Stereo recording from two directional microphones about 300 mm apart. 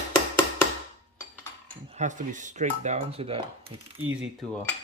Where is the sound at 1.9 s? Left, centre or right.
Right.